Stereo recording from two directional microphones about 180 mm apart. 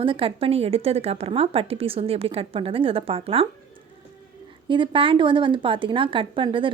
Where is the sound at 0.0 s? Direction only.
30° right (ahead or behind).